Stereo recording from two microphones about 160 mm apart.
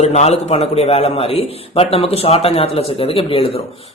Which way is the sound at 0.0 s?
45° left (ahead or behind).